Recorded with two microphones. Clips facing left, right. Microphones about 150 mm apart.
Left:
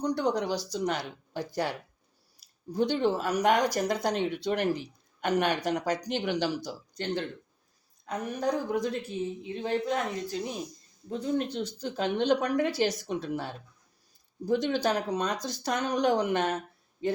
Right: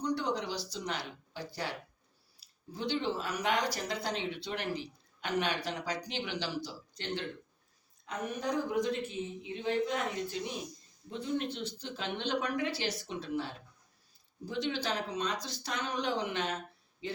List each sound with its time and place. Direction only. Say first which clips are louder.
0.0 s a sound: left 5 dB; 45° left (ahead or behind)
0.7 s speech: left 8 dB; 45° left (ahead or behind)
2.7 s a woman's voice: left 7 dB; 45° left (ahead or behind)
14.4 s speech: left 8 dB; 45° left (ahead or behind)